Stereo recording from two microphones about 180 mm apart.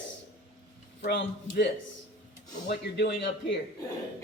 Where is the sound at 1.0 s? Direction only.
60° left (ahead or behind).